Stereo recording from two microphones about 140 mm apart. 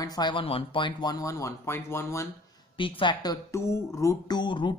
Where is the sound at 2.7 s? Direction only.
35° left (ahead or behind).